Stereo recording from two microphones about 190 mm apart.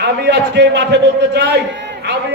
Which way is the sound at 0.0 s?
65° right (ahead or behind).